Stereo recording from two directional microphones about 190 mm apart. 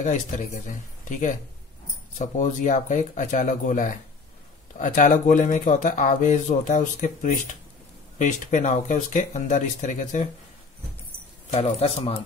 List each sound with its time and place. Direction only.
0.0 s speech: 40° left (ahead or behind)
11.5 s speech: 35° left (ahead or behind)